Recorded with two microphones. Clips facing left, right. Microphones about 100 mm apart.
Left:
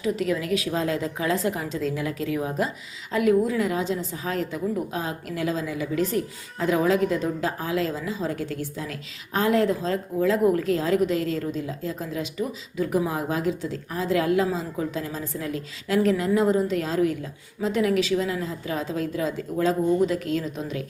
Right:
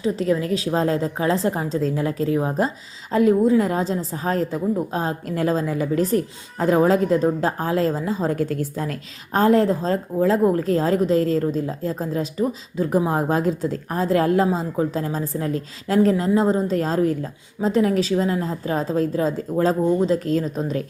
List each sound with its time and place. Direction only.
0.0 s a woman's voice: 35° right (ahead or behind)